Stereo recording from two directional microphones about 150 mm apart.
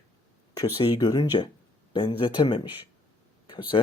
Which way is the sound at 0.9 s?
25° left (ahead or behind).